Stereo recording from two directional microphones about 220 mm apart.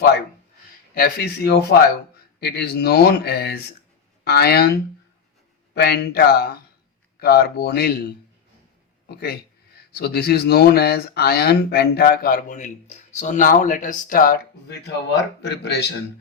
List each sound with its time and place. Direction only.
0.9 s speech: 45° left (ahead or behind)
5.7 s speech: 45° left (ahead or behind)
15.4 s speech: 50° left (ahead or behind)